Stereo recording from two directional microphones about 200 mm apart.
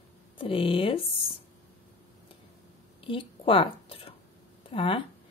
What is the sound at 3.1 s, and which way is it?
Speech, 25° left (ahead or behind).